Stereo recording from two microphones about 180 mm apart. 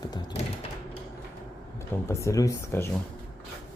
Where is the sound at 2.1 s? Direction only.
15° left (ahead or behind).